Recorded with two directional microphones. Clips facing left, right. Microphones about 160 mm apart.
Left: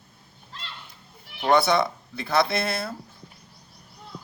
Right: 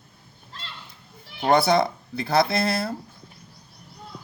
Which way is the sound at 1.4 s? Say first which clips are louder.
Right 1 dB; 40° right (ahead or behind).